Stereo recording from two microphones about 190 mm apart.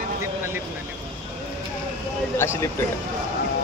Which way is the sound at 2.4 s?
15° left (ahead or behind).